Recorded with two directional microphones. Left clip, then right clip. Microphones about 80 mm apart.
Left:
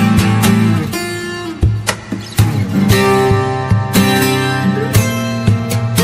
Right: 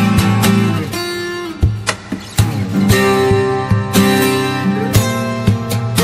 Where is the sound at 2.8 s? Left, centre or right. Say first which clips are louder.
Left 1 dB; right.